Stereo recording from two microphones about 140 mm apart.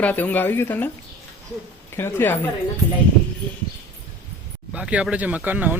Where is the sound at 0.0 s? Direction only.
10° left (ahead or behind).